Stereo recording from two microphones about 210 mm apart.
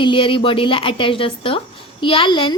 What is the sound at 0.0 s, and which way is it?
A woman's voice, 25° left (ahead or behind).